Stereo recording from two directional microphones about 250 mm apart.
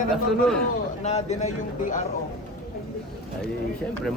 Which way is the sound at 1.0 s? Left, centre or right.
Left.